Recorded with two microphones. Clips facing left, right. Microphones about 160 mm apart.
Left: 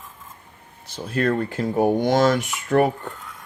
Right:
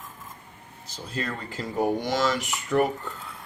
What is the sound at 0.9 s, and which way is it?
Speech, 60° left (ahead or behind).